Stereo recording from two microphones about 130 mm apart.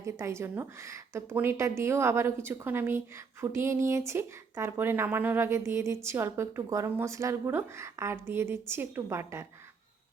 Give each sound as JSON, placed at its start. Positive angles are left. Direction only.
{"t": 0.0, "sound": "speech", "side_deg": -20}